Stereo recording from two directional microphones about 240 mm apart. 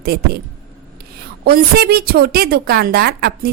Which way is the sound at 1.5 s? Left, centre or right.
Right.